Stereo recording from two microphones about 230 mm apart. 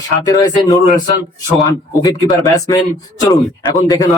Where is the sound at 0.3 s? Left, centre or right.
Centre.